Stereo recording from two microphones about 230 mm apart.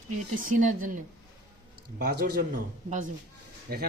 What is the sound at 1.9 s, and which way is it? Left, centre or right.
Speech, right.